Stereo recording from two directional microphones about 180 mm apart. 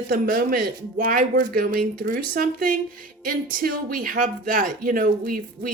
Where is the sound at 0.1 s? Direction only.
55° right (ahead or behind).